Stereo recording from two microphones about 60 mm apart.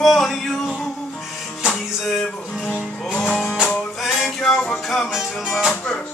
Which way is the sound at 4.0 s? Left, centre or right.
Centre.